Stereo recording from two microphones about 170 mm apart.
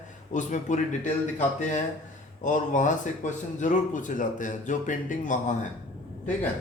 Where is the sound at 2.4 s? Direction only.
45° left (ahead or behind).